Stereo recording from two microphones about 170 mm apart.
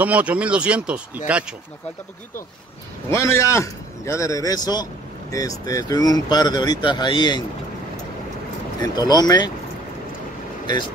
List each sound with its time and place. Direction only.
0.0 s speech: 10° right (ahead or behind)
3.1 s a man's voice: 15° left (ahead or behind)
8.8 s speech: 25° left (ahead or behind)